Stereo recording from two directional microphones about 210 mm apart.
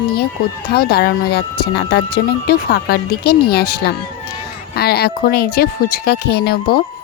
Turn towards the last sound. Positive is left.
turn(degrees=50)  # may be behind; listen again after turning